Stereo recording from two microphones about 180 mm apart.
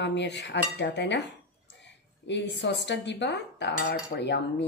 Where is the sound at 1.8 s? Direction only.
80° left.